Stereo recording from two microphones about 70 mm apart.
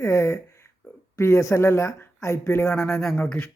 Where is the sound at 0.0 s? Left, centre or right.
Left.